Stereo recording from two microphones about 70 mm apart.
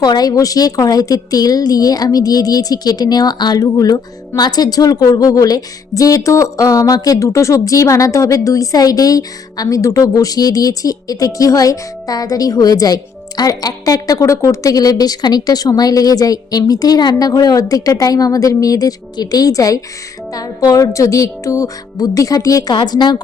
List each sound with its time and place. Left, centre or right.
0.0 s a woman's voice: left
4.4 s a woman's voice: left
22.7 s a woman's voice: left